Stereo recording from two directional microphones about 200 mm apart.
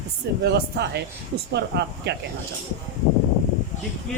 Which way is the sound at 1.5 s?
55° right (ahead or behind).